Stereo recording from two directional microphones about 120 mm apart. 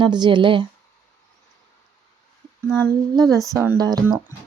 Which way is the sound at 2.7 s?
30° right (ahead or behind).